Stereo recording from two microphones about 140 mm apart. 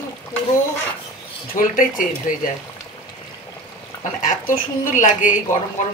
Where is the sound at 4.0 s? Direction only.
75° left (ahead or behind).